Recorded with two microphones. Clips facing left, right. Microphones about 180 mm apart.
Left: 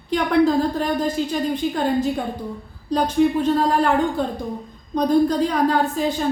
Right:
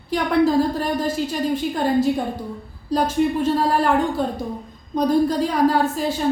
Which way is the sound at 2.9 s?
5° right (ahead or behind).